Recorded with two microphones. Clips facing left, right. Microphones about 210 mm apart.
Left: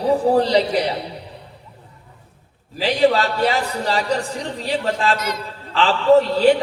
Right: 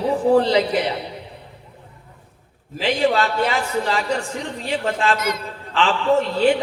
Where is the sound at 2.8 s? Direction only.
35° left (ahead or behind).